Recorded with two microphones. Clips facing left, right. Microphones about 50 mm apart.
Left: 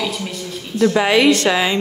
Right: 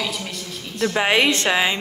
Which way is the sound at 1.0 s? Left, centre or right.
Right.